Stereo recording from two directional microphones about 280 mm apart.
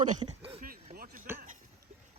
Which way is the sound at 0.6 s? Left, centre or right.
Right.